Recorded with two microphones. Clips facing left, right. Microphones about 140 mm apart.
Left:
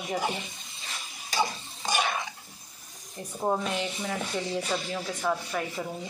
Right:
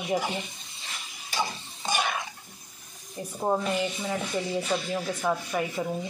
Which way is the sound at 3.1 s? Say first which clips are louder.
Right 1 dB; 5° right (ahead or behind).